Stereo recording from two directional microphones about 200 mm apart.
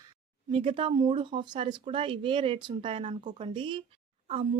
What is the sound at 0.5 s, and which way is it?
Speech, 25° right (ahead or behind).